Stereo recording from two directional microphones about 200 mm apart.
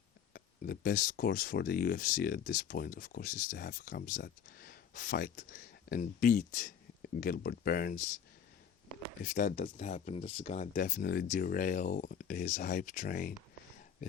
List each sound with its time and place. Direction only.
0.3 s speech: 50° left (ahead or behind)
9.2 s speech: 40° left (ahead or behind)